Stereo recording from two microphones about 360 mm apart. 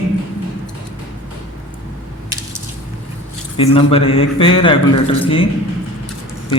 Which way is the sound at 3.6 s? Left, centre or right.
Centre.